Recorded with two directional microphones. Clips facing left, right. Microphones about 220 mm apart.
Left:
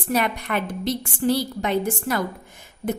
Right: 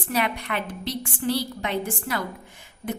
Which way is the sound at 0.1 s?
45° left (ahead or behind).